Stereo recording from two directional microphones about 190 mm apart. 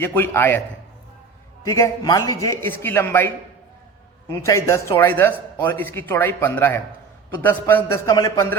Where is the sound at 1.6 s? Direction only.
15° left (ahead or behind).